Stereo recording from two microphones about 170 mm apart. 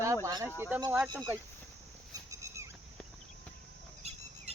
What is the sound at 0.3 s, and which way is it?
Speech, 25° right (ahead or behind).